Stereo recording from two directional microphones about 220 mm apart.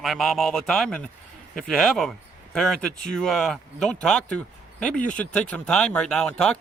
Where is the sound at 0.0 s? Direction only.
Centre (ahead or behind).